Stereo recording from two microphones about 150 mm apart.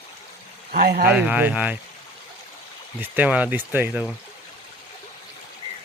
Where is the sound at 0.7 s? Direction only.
70° right (ahead or behind).